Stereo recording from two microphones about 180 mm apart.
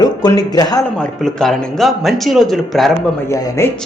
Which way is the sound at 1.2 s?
Centre (ahead or behind).